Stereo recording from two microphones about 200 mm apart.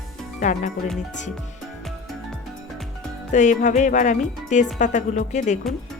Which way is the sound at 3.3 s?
35° left (ahead or behind).